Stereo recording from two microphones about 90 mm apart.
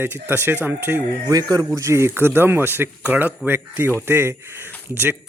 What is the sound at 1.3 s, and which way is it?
Speech, 45° right (ahead or behind).